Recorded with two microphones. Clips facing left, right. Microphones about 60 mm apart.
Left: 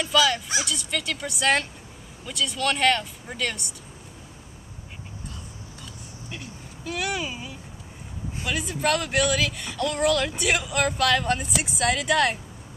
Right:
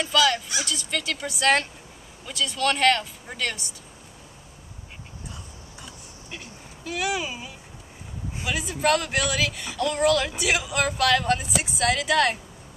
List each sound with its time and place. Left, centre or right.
0.0 s speech: centre
6.3 s a sound: centre
8.5 s speech: centre